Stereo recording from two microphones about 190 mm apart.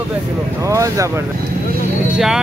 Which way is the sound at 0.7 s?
15° right (ahead or behind).